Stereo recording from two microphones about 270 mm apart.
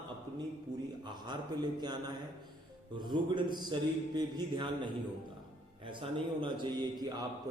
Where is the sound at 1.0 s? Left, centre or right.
Centre.